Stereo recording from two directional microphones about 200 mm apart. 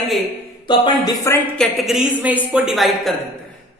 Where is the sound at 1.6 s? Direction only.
Centre (ahead or behind).